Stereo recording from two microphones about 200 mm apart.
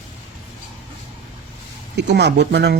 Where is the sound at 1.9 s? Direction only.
60° right (ahead or behind).